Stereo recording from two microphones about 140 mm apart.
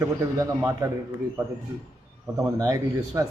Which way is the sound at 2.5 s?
25° right (ahead or behind).